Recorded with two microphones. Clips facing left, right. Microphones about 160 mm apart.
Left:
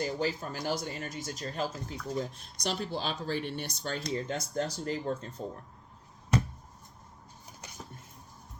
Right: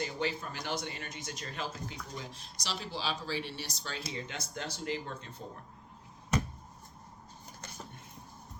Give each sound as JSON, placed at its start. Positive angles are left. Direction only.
{"t": 0.0, "sound": "speech", "side_deg": 40}